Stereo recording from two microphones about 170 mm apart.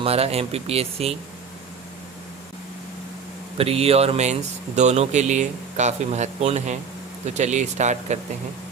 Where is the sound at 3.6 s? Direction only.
35° right (ahead or behind).